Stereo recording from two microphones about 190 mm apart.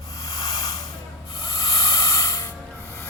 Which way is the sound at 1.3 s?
20° left (ahead or behind).